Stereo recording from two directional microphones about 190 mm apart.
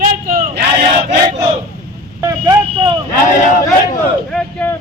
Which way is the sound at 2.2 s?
15° right (ahead or behind).